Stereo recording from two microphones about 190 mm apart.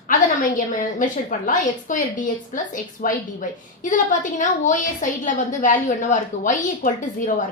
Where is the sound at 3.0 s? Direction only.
45° left (ahead or behind).